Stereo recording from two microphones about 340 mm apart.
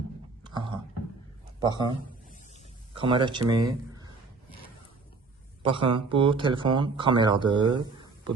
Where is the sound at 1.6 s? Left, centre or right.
Centre.